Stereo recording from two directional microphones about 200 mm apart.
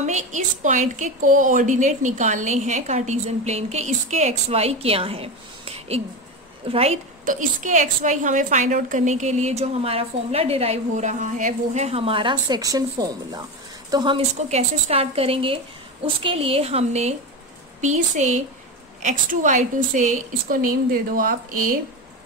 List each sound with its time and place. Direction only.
0.0 s a woman's voice: 35° right (ahead or behind)